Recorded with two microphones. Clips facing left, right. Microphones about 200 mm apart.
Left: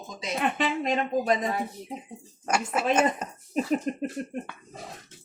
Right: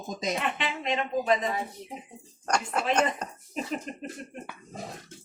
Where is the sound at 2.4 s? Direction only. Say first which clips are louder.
Left 2 dB; 5° left (ahead or behind).